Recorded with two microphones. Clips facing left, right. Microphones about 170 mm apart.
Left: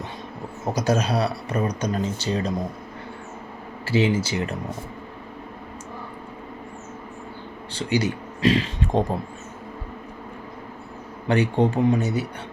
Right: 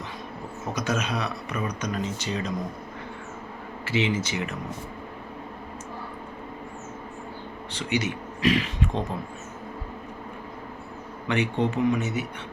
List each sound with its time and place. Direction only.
0.7 s speech: 35° left (ahead or behind)
3.8 s speech: 30° left (ahead or behind)
7.7 s speech: 30° left (ahead or behind)
11.3 s speech: 35° left (ahead or behind)